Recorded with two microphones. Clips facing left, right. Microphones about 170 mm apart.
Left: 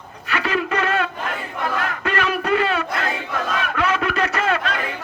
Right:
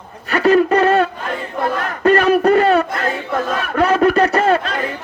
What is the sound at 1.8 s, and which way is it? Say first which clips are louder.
Battle cry: right 13 dB; 40° right (ahead or behind).